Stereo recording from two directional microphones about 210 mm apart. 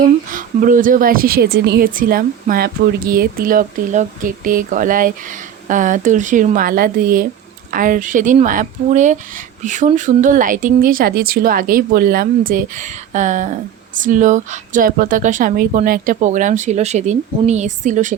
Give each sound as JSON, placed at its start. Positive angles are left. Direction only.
{"t": 0.3, "sound": "speech", "side_deg": -40}